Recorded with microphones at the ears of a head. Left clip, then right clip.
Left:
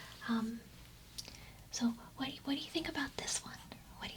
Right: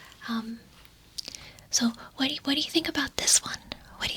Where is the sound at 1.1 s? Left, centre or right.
Right.